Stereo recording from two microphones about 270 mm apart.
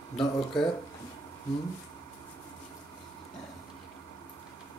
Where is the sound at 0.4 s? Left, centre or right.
Centre.